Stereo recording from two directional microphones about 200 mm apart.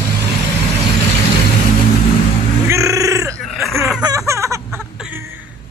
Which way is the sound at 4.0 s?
15° right (ahead or behind).